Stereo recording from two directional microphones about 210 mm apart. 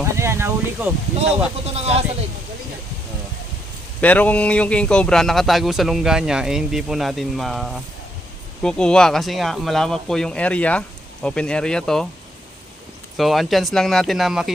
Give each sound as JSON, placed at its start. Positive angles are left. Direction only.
{"t": 0.2, "sound": "a sound", "side_deg": -10}
{"t": 1.6, "sound": "speech", "side_deg": -30}
{"t": 4.0, "sound": "speech", "side_deg": 5}
{"t": 13.1, "sound": "speech", "side_deg": 0}